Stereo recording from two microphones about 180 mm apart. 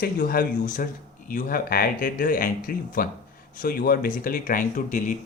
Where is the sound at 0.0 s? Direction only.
55° left (ahead or behind).